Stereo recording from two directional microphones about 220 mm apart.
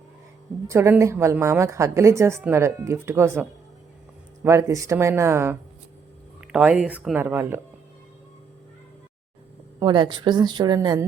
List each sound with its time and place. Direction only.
0.7 s a woman's voice: 15° right (ahead or behind)
4.4 s a woman's voice: 15° right (ahead or behind)
9.8 s a woman's voice: 20° right (ahead or behind)